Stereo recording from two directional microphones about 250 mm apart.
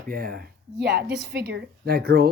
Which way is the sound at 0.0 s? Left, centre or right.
Right.